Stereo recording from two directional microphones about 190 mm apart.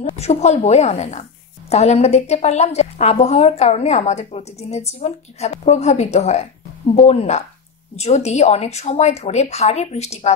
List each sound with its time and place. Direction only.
0.1 s a woman's voice: 35° left (ahead or behind)